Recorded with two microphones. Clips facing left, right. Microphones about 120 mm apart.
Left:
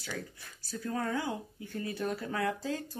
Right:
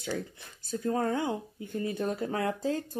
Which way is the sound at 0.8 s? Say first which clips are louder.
Right 5 dB; 35° right (ahead or behind).